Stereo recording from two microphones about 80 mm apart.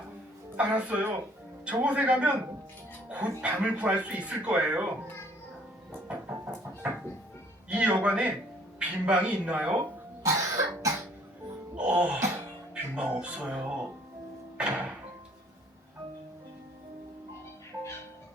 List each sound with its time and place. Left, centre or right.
0.5 s speech: centre
5.9 s music: right
7.7 s speech: centre
10.2 s cough: right
11.7 s music: centre
12.7 s speech: centre
14.7 s music: centre